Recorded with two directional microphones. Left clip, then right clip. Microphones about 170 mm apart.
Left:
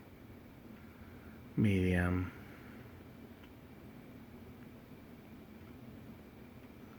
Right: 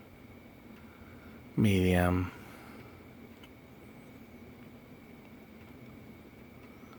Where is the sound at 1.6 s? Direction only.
25° right (ahead or behind).